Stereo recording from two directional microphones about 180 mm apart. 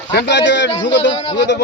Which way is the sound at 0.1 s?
75° left (ahead or behind).